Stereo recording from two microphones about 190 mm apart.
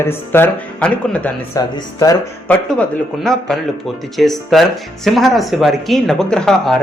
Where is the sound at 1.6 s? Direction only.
20° left (ahead or behind).